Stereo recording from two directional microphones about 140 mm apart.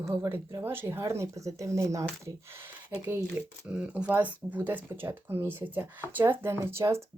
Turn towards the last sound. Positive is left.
turn(degrees=-20)  # may be behind; listen again after turning